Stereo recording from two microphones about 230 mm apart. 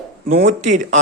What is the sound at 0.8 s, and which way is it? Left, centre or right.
Speech, right.